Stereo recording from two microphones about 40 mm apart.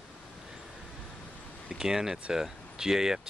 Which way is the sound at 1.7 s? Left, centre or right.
Centre.